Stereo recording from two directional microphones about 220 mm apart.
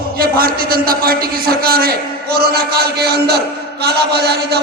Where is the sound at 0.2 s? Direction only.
45° right (ahead or behind).